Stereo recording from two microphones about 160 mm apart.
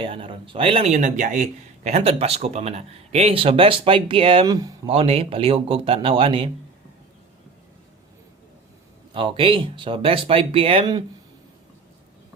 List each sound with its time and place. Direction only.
0.0 s speech: 35° right (ahead or behind)
0.9 s speech: 50° right (ahead or behind); by 4.9 s 25° right (ahead or behind)
4.9 s speech: 35° right (ahead or behind)
9.1 s speech: 30° right (ahead or behind)